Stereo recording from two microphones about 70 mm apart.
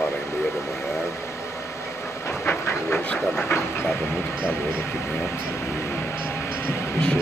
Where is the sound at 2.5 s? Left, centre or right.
Left.